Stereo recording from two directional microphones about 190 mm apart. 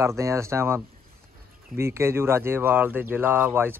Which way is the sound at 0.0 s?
15° right (ahead or behind).